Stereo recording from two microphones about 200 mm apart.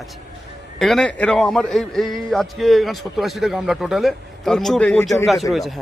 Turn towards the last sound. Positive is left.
turn(degrees=0)  # may be behind; listen again after turning